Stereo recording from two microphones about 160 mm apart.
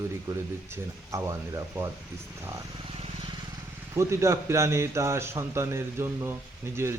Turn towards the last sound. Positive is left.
turn(degrees=-15)  # may be behind; listen again after turning